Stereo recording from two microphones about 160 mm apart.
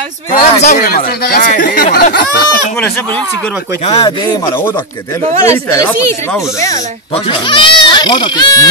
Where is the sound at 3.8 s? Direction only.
40° left (ahead or behind).